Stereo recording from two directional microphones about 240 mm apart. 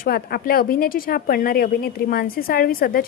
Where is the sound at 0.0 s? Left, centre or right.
Left.